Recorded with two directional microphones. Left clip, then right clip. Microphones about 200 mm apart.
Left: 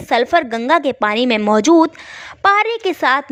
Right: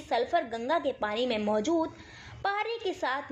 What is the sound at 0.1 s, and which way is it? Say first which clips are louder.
A woman's voice: left 14 dB; 40° left (ahead or behind).